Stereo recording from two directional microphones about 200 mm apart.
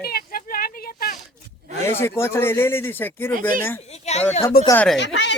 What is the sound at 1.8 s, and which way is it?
A man's voice, 15° left (ahead or behind).